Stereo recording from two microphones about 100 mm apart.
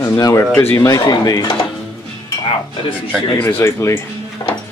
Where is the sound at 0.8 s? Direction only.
40° left (ahead or behind).